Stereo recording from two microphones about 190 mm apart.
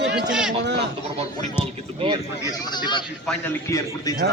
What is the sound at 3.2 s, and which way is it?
Speech, 10° left (ahead or behind).